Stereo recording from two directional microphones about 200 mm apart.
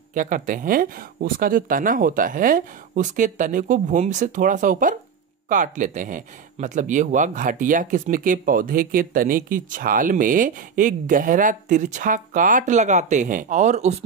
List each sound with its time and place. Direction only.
0.1 s speech: 40° right (ahead or behind)